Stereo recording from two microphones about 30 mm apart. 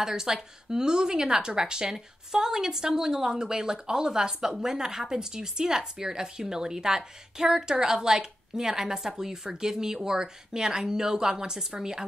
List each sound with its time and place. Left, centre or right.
0.0 s speech: centre